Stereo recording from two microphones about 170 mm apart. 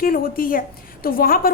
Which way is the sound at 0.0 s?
60° left (ahead or behind).